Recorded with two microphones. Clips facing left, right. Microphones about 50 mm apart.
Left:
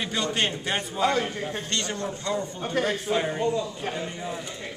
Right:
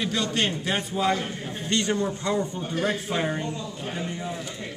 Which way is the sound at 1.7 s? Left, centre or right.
Centre.